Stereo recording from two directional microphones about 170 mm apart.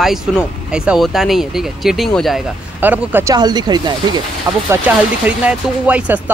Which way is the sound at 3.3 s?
25° right (ahead or behind).